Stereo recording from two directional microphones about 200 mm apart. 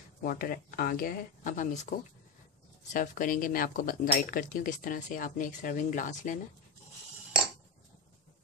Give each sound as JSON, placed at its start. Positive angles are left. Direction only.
{"t": 0.2, "sound": "speech", "side_deg": 45}